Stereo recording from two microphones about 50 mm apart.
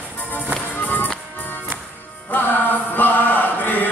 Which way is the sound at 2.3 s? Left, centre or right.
Left.